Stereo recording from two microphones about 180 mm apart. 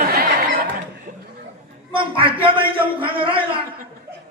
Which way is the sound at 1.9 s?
30° right (ahead or behind).